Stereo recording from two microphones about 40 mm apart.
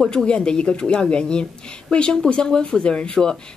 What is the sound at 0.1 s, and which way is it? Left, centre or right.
Speech, left.